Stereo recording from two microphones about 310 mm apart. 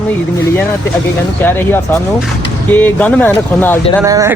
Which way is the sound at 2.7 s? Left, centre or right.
Centre.